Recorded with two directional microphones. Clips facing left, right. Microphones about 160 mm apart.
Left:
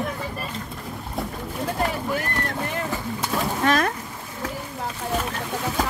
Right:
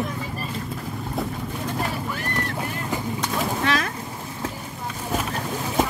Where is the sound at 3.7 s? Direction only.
50° left (ahead or behind).